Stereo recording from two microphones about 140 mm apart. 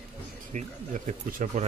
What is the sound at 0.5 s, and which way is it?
Speech, 60° right (ahead or behind).